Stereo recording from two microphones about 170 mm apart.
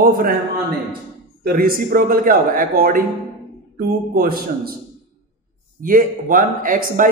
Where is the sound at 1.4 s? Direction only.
60° right (ahead or behind).